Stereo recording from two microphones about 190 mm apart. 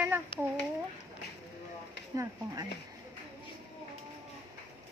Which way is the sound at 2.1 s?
20° right (ahead or behind).